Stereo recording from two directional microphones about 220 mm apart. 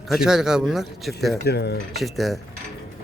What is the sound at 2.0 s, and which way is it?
Speech, centre (ahead or behind).